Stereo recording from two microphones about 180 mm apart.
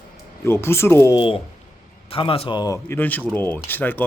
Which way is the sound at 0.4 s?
15° left (ahead or behind).